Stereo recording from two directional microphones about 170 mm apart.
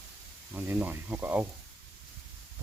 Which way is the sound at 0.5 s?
10° right (ahead or behind).